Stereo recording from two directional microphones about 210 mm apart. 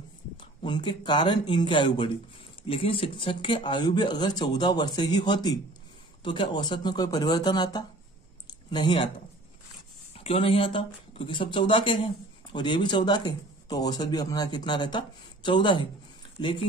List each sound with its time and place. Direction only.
0.4 s speech: 20° left (ahead or behind)
10.1 s speech: 25° left (ahead or behind)